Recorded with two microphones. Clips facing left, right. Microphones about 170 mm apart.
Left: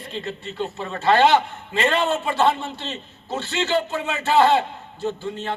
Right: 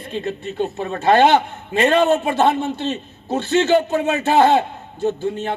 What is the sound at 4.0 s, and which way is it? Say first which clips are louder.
Speech: right 3 dB; 50° right (ahead or behind).